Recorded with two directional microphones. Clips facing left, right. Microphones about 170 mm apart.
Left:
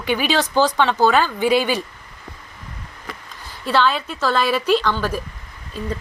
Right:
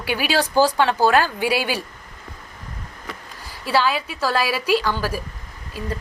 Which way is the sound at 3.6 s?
10° right (ahead or behind).